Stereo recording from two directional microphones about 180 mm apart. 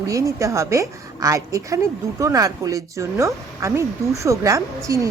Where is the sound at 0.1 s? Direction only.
15° right (ahead or behind).